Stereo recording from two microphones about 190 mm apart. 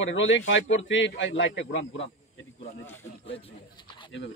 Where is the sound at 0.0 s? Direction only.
80° left.